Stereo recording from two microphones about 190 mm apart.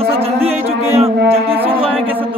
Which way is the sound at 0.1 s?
30° right (ahead or behind).